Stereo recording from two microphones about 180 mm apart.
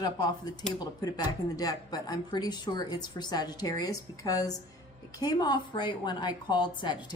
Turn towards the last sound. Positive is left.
turn(degrees=25)  # may be behind; listen again after turning